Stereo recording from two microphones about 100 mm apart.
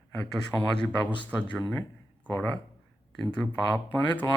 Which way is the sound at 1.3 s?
15° left (ahead or behind).